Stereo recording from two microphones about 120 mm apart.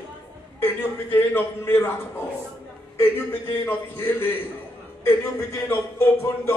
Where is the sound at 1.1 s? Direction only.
20° left (ahead or behind).